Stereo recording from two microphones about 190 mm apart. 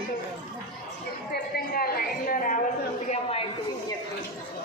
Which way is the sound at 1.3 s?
55° left (ahead or behind).